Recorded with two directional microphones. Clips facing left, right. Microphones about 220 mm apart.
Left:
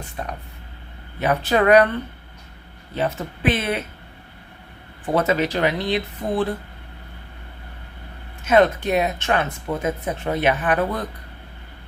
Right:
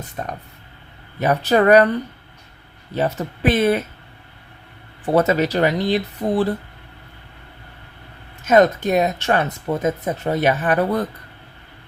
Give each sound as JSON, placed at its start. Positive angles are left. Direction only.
{"t": 0.2, "sound": "speech", "side_deg": -40}
{"t": 2.9, "sound": "speech", "side_deg": -40}
{"t": 5.0, "sound": "speech", "side_deg": -40}
{"t": 8.4, "sound": "speech", "side_deg": -40}